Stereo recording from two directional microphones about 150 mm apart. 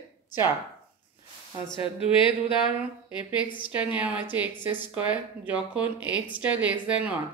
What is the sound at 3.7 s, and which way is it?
Speech, 10° right (ahead or behind).